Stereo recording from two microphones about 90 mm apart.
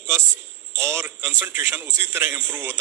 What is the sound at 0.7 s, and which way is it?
A man's voice, 30° right (ahead or behind).